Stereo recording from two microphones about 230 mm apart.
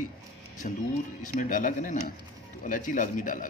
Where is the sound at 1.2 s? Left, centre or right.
Left.